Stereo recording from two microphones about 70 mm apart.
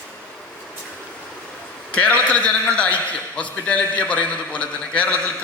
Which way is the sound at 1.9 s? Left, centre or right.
Centre.